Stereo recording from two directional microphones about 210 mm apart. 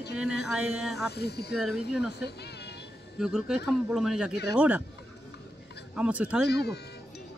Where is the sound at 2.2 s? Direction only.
50° left (ahead or behind).